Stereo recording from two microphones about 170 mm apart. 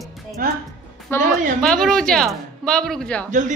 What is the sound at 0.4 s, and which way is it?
Speech, 60° right (ahead or behind).